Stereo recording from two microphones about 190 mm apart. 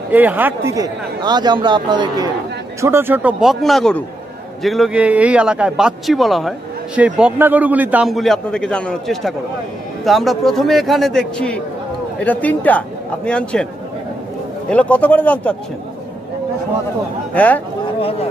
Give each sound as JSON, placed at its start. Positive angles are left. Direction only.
{"t": 0.1, "sound": "a man's voice", "side_deg": -10}
{"t": 14.7, "sound": "a man's voice", "side_deg": 5}
{"t": 17.3, "sound": "speech", "side_deg": 10}